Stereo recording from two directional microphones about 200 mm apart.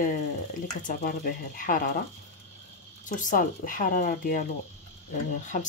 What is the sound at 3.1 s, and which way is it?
Speech, 40° left (ahead or behind).